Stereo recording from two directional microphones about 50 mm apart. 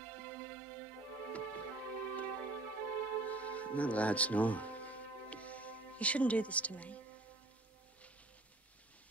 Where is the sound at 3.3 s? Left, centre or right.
Left.